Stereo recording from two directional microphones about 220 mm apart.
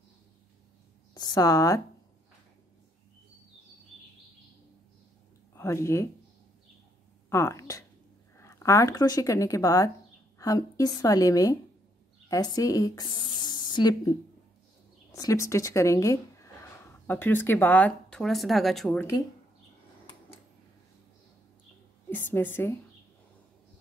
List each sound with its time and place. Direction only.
1.1 s a woman's voice: 20° left (ahead or behind)
5.5 s speech: 15° left (ahead or behind)
7.2 s a woman's voice: 15° left (ahead or behind)
15.1 s speech: 15° left (ahead or behind)
22.3 s speech: 10° left (ahead or behind)